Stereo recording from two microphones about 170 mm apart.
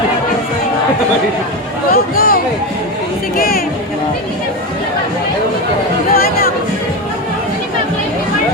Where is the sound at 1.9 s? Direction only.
60° left (ahead or behind).